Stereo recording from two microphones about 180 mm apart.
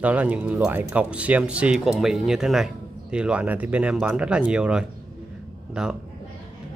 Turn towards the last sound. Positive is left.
turn(degrees=-5)  # may be behind; listen again after turning